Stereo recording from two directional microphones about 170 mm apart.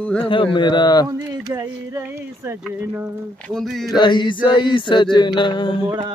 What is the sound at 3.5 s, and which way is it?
Speech, centre (ahead or behind).